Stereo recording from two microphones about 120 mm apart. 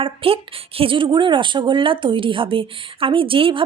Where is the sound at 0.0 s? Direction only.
50° right (ahead or behind).